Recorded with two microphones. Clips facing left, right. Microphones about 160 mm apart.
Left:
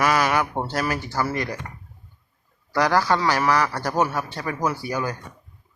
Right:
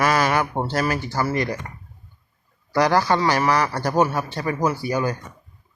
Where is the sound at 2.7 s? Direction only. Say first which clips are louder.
Right 2 dB; 15° right (ahead or behind).